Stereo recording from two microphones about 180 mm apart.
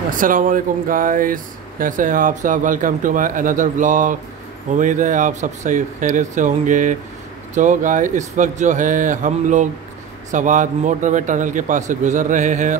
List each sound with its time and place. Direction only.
0.1 s speech: 50° right (ahead or behind)